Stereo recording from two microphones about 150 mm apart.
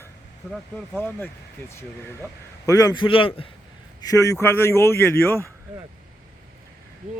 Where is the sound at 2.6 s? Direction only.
25° left (ahead or behind).